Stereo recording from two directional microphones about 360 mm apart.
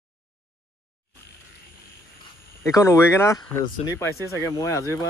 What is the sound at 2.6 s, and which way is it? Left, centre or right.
Speech, centre.